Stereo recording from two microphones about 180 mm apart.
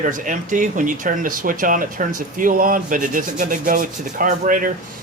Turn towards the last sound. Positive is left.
turn(degrees=-50)  # may be behind; listen again after turning